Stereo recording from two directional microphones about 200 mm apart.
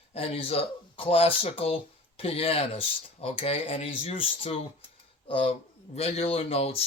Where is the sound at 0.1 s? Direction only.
30° left (ahead or behind).